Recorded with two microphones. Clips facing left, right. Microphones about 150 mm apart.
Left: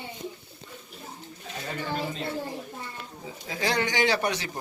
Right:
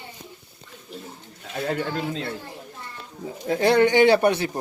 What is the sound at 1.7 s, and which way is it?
Speech, 85° right.